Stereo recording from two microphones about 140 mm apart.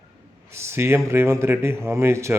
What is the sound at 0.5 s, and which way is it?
Speech, 20° right (ahead or behind).